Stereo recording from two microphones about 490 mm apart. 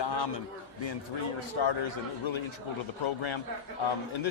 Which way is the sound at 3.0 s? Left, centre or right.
Left.